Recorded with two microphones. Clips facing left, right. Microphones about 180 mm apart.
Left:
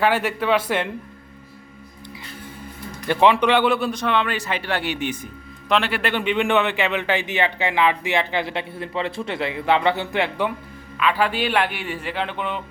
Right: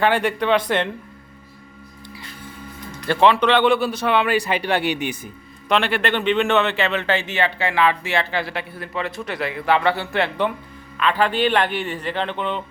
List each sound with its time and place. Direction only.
0.0 s a man's voice: 5° left (ahead or behind)
3.1 s a man's voice: 15° left (ahead or behind); by 5.3 s 15° right (ahead or behind)
5.6 s speech: centre (ahead or behind)